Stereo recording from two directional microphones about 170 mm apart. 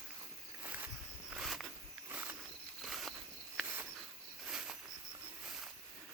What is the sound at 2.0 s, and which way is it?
Wild animals, 10° right (ahead or behind).